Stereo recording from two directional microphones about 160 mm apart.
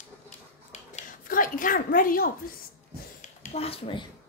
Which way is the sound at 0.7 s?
50° left (ahead or behind).